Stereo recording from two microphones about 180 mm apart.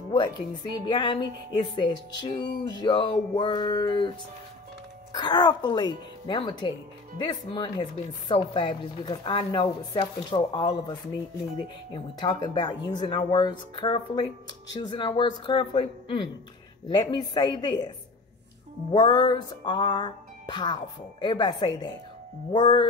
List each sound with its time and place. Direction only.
0.1 s speech: 25° left (ahead or behind)
5.1 s speech: 25° left (ahead or behind)
18.9 s speech: 25° left (ahead or behind)